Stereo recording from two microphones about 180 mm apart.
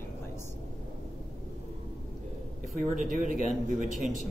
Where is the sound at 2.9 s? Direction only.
45° right (ahead or behind).